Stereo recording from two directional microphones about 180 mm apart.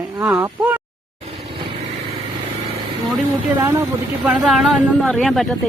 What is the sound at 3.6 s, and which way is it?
Speech, 15° right (ahead or behind).